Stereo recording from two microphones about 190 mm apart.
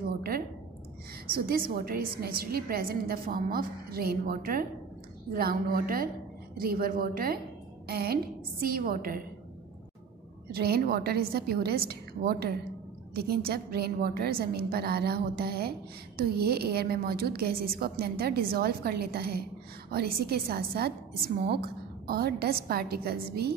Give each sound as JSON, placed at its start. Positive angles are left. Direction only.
{"t": 1.3, "sound": "a woman's voice", "side_deg": -50}
{"t": 10.5, "sound": "a woman's voice", "side_deg": -55}